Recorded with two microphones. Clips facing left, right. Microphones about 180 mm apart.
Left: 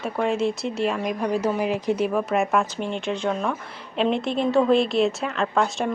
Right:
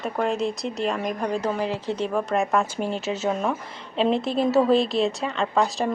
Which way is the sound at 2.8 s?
40° right (ahead or behind).